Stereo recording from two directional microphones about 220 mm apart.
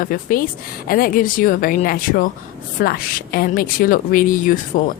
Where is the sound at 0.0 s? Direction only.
40° left (ahead or behind).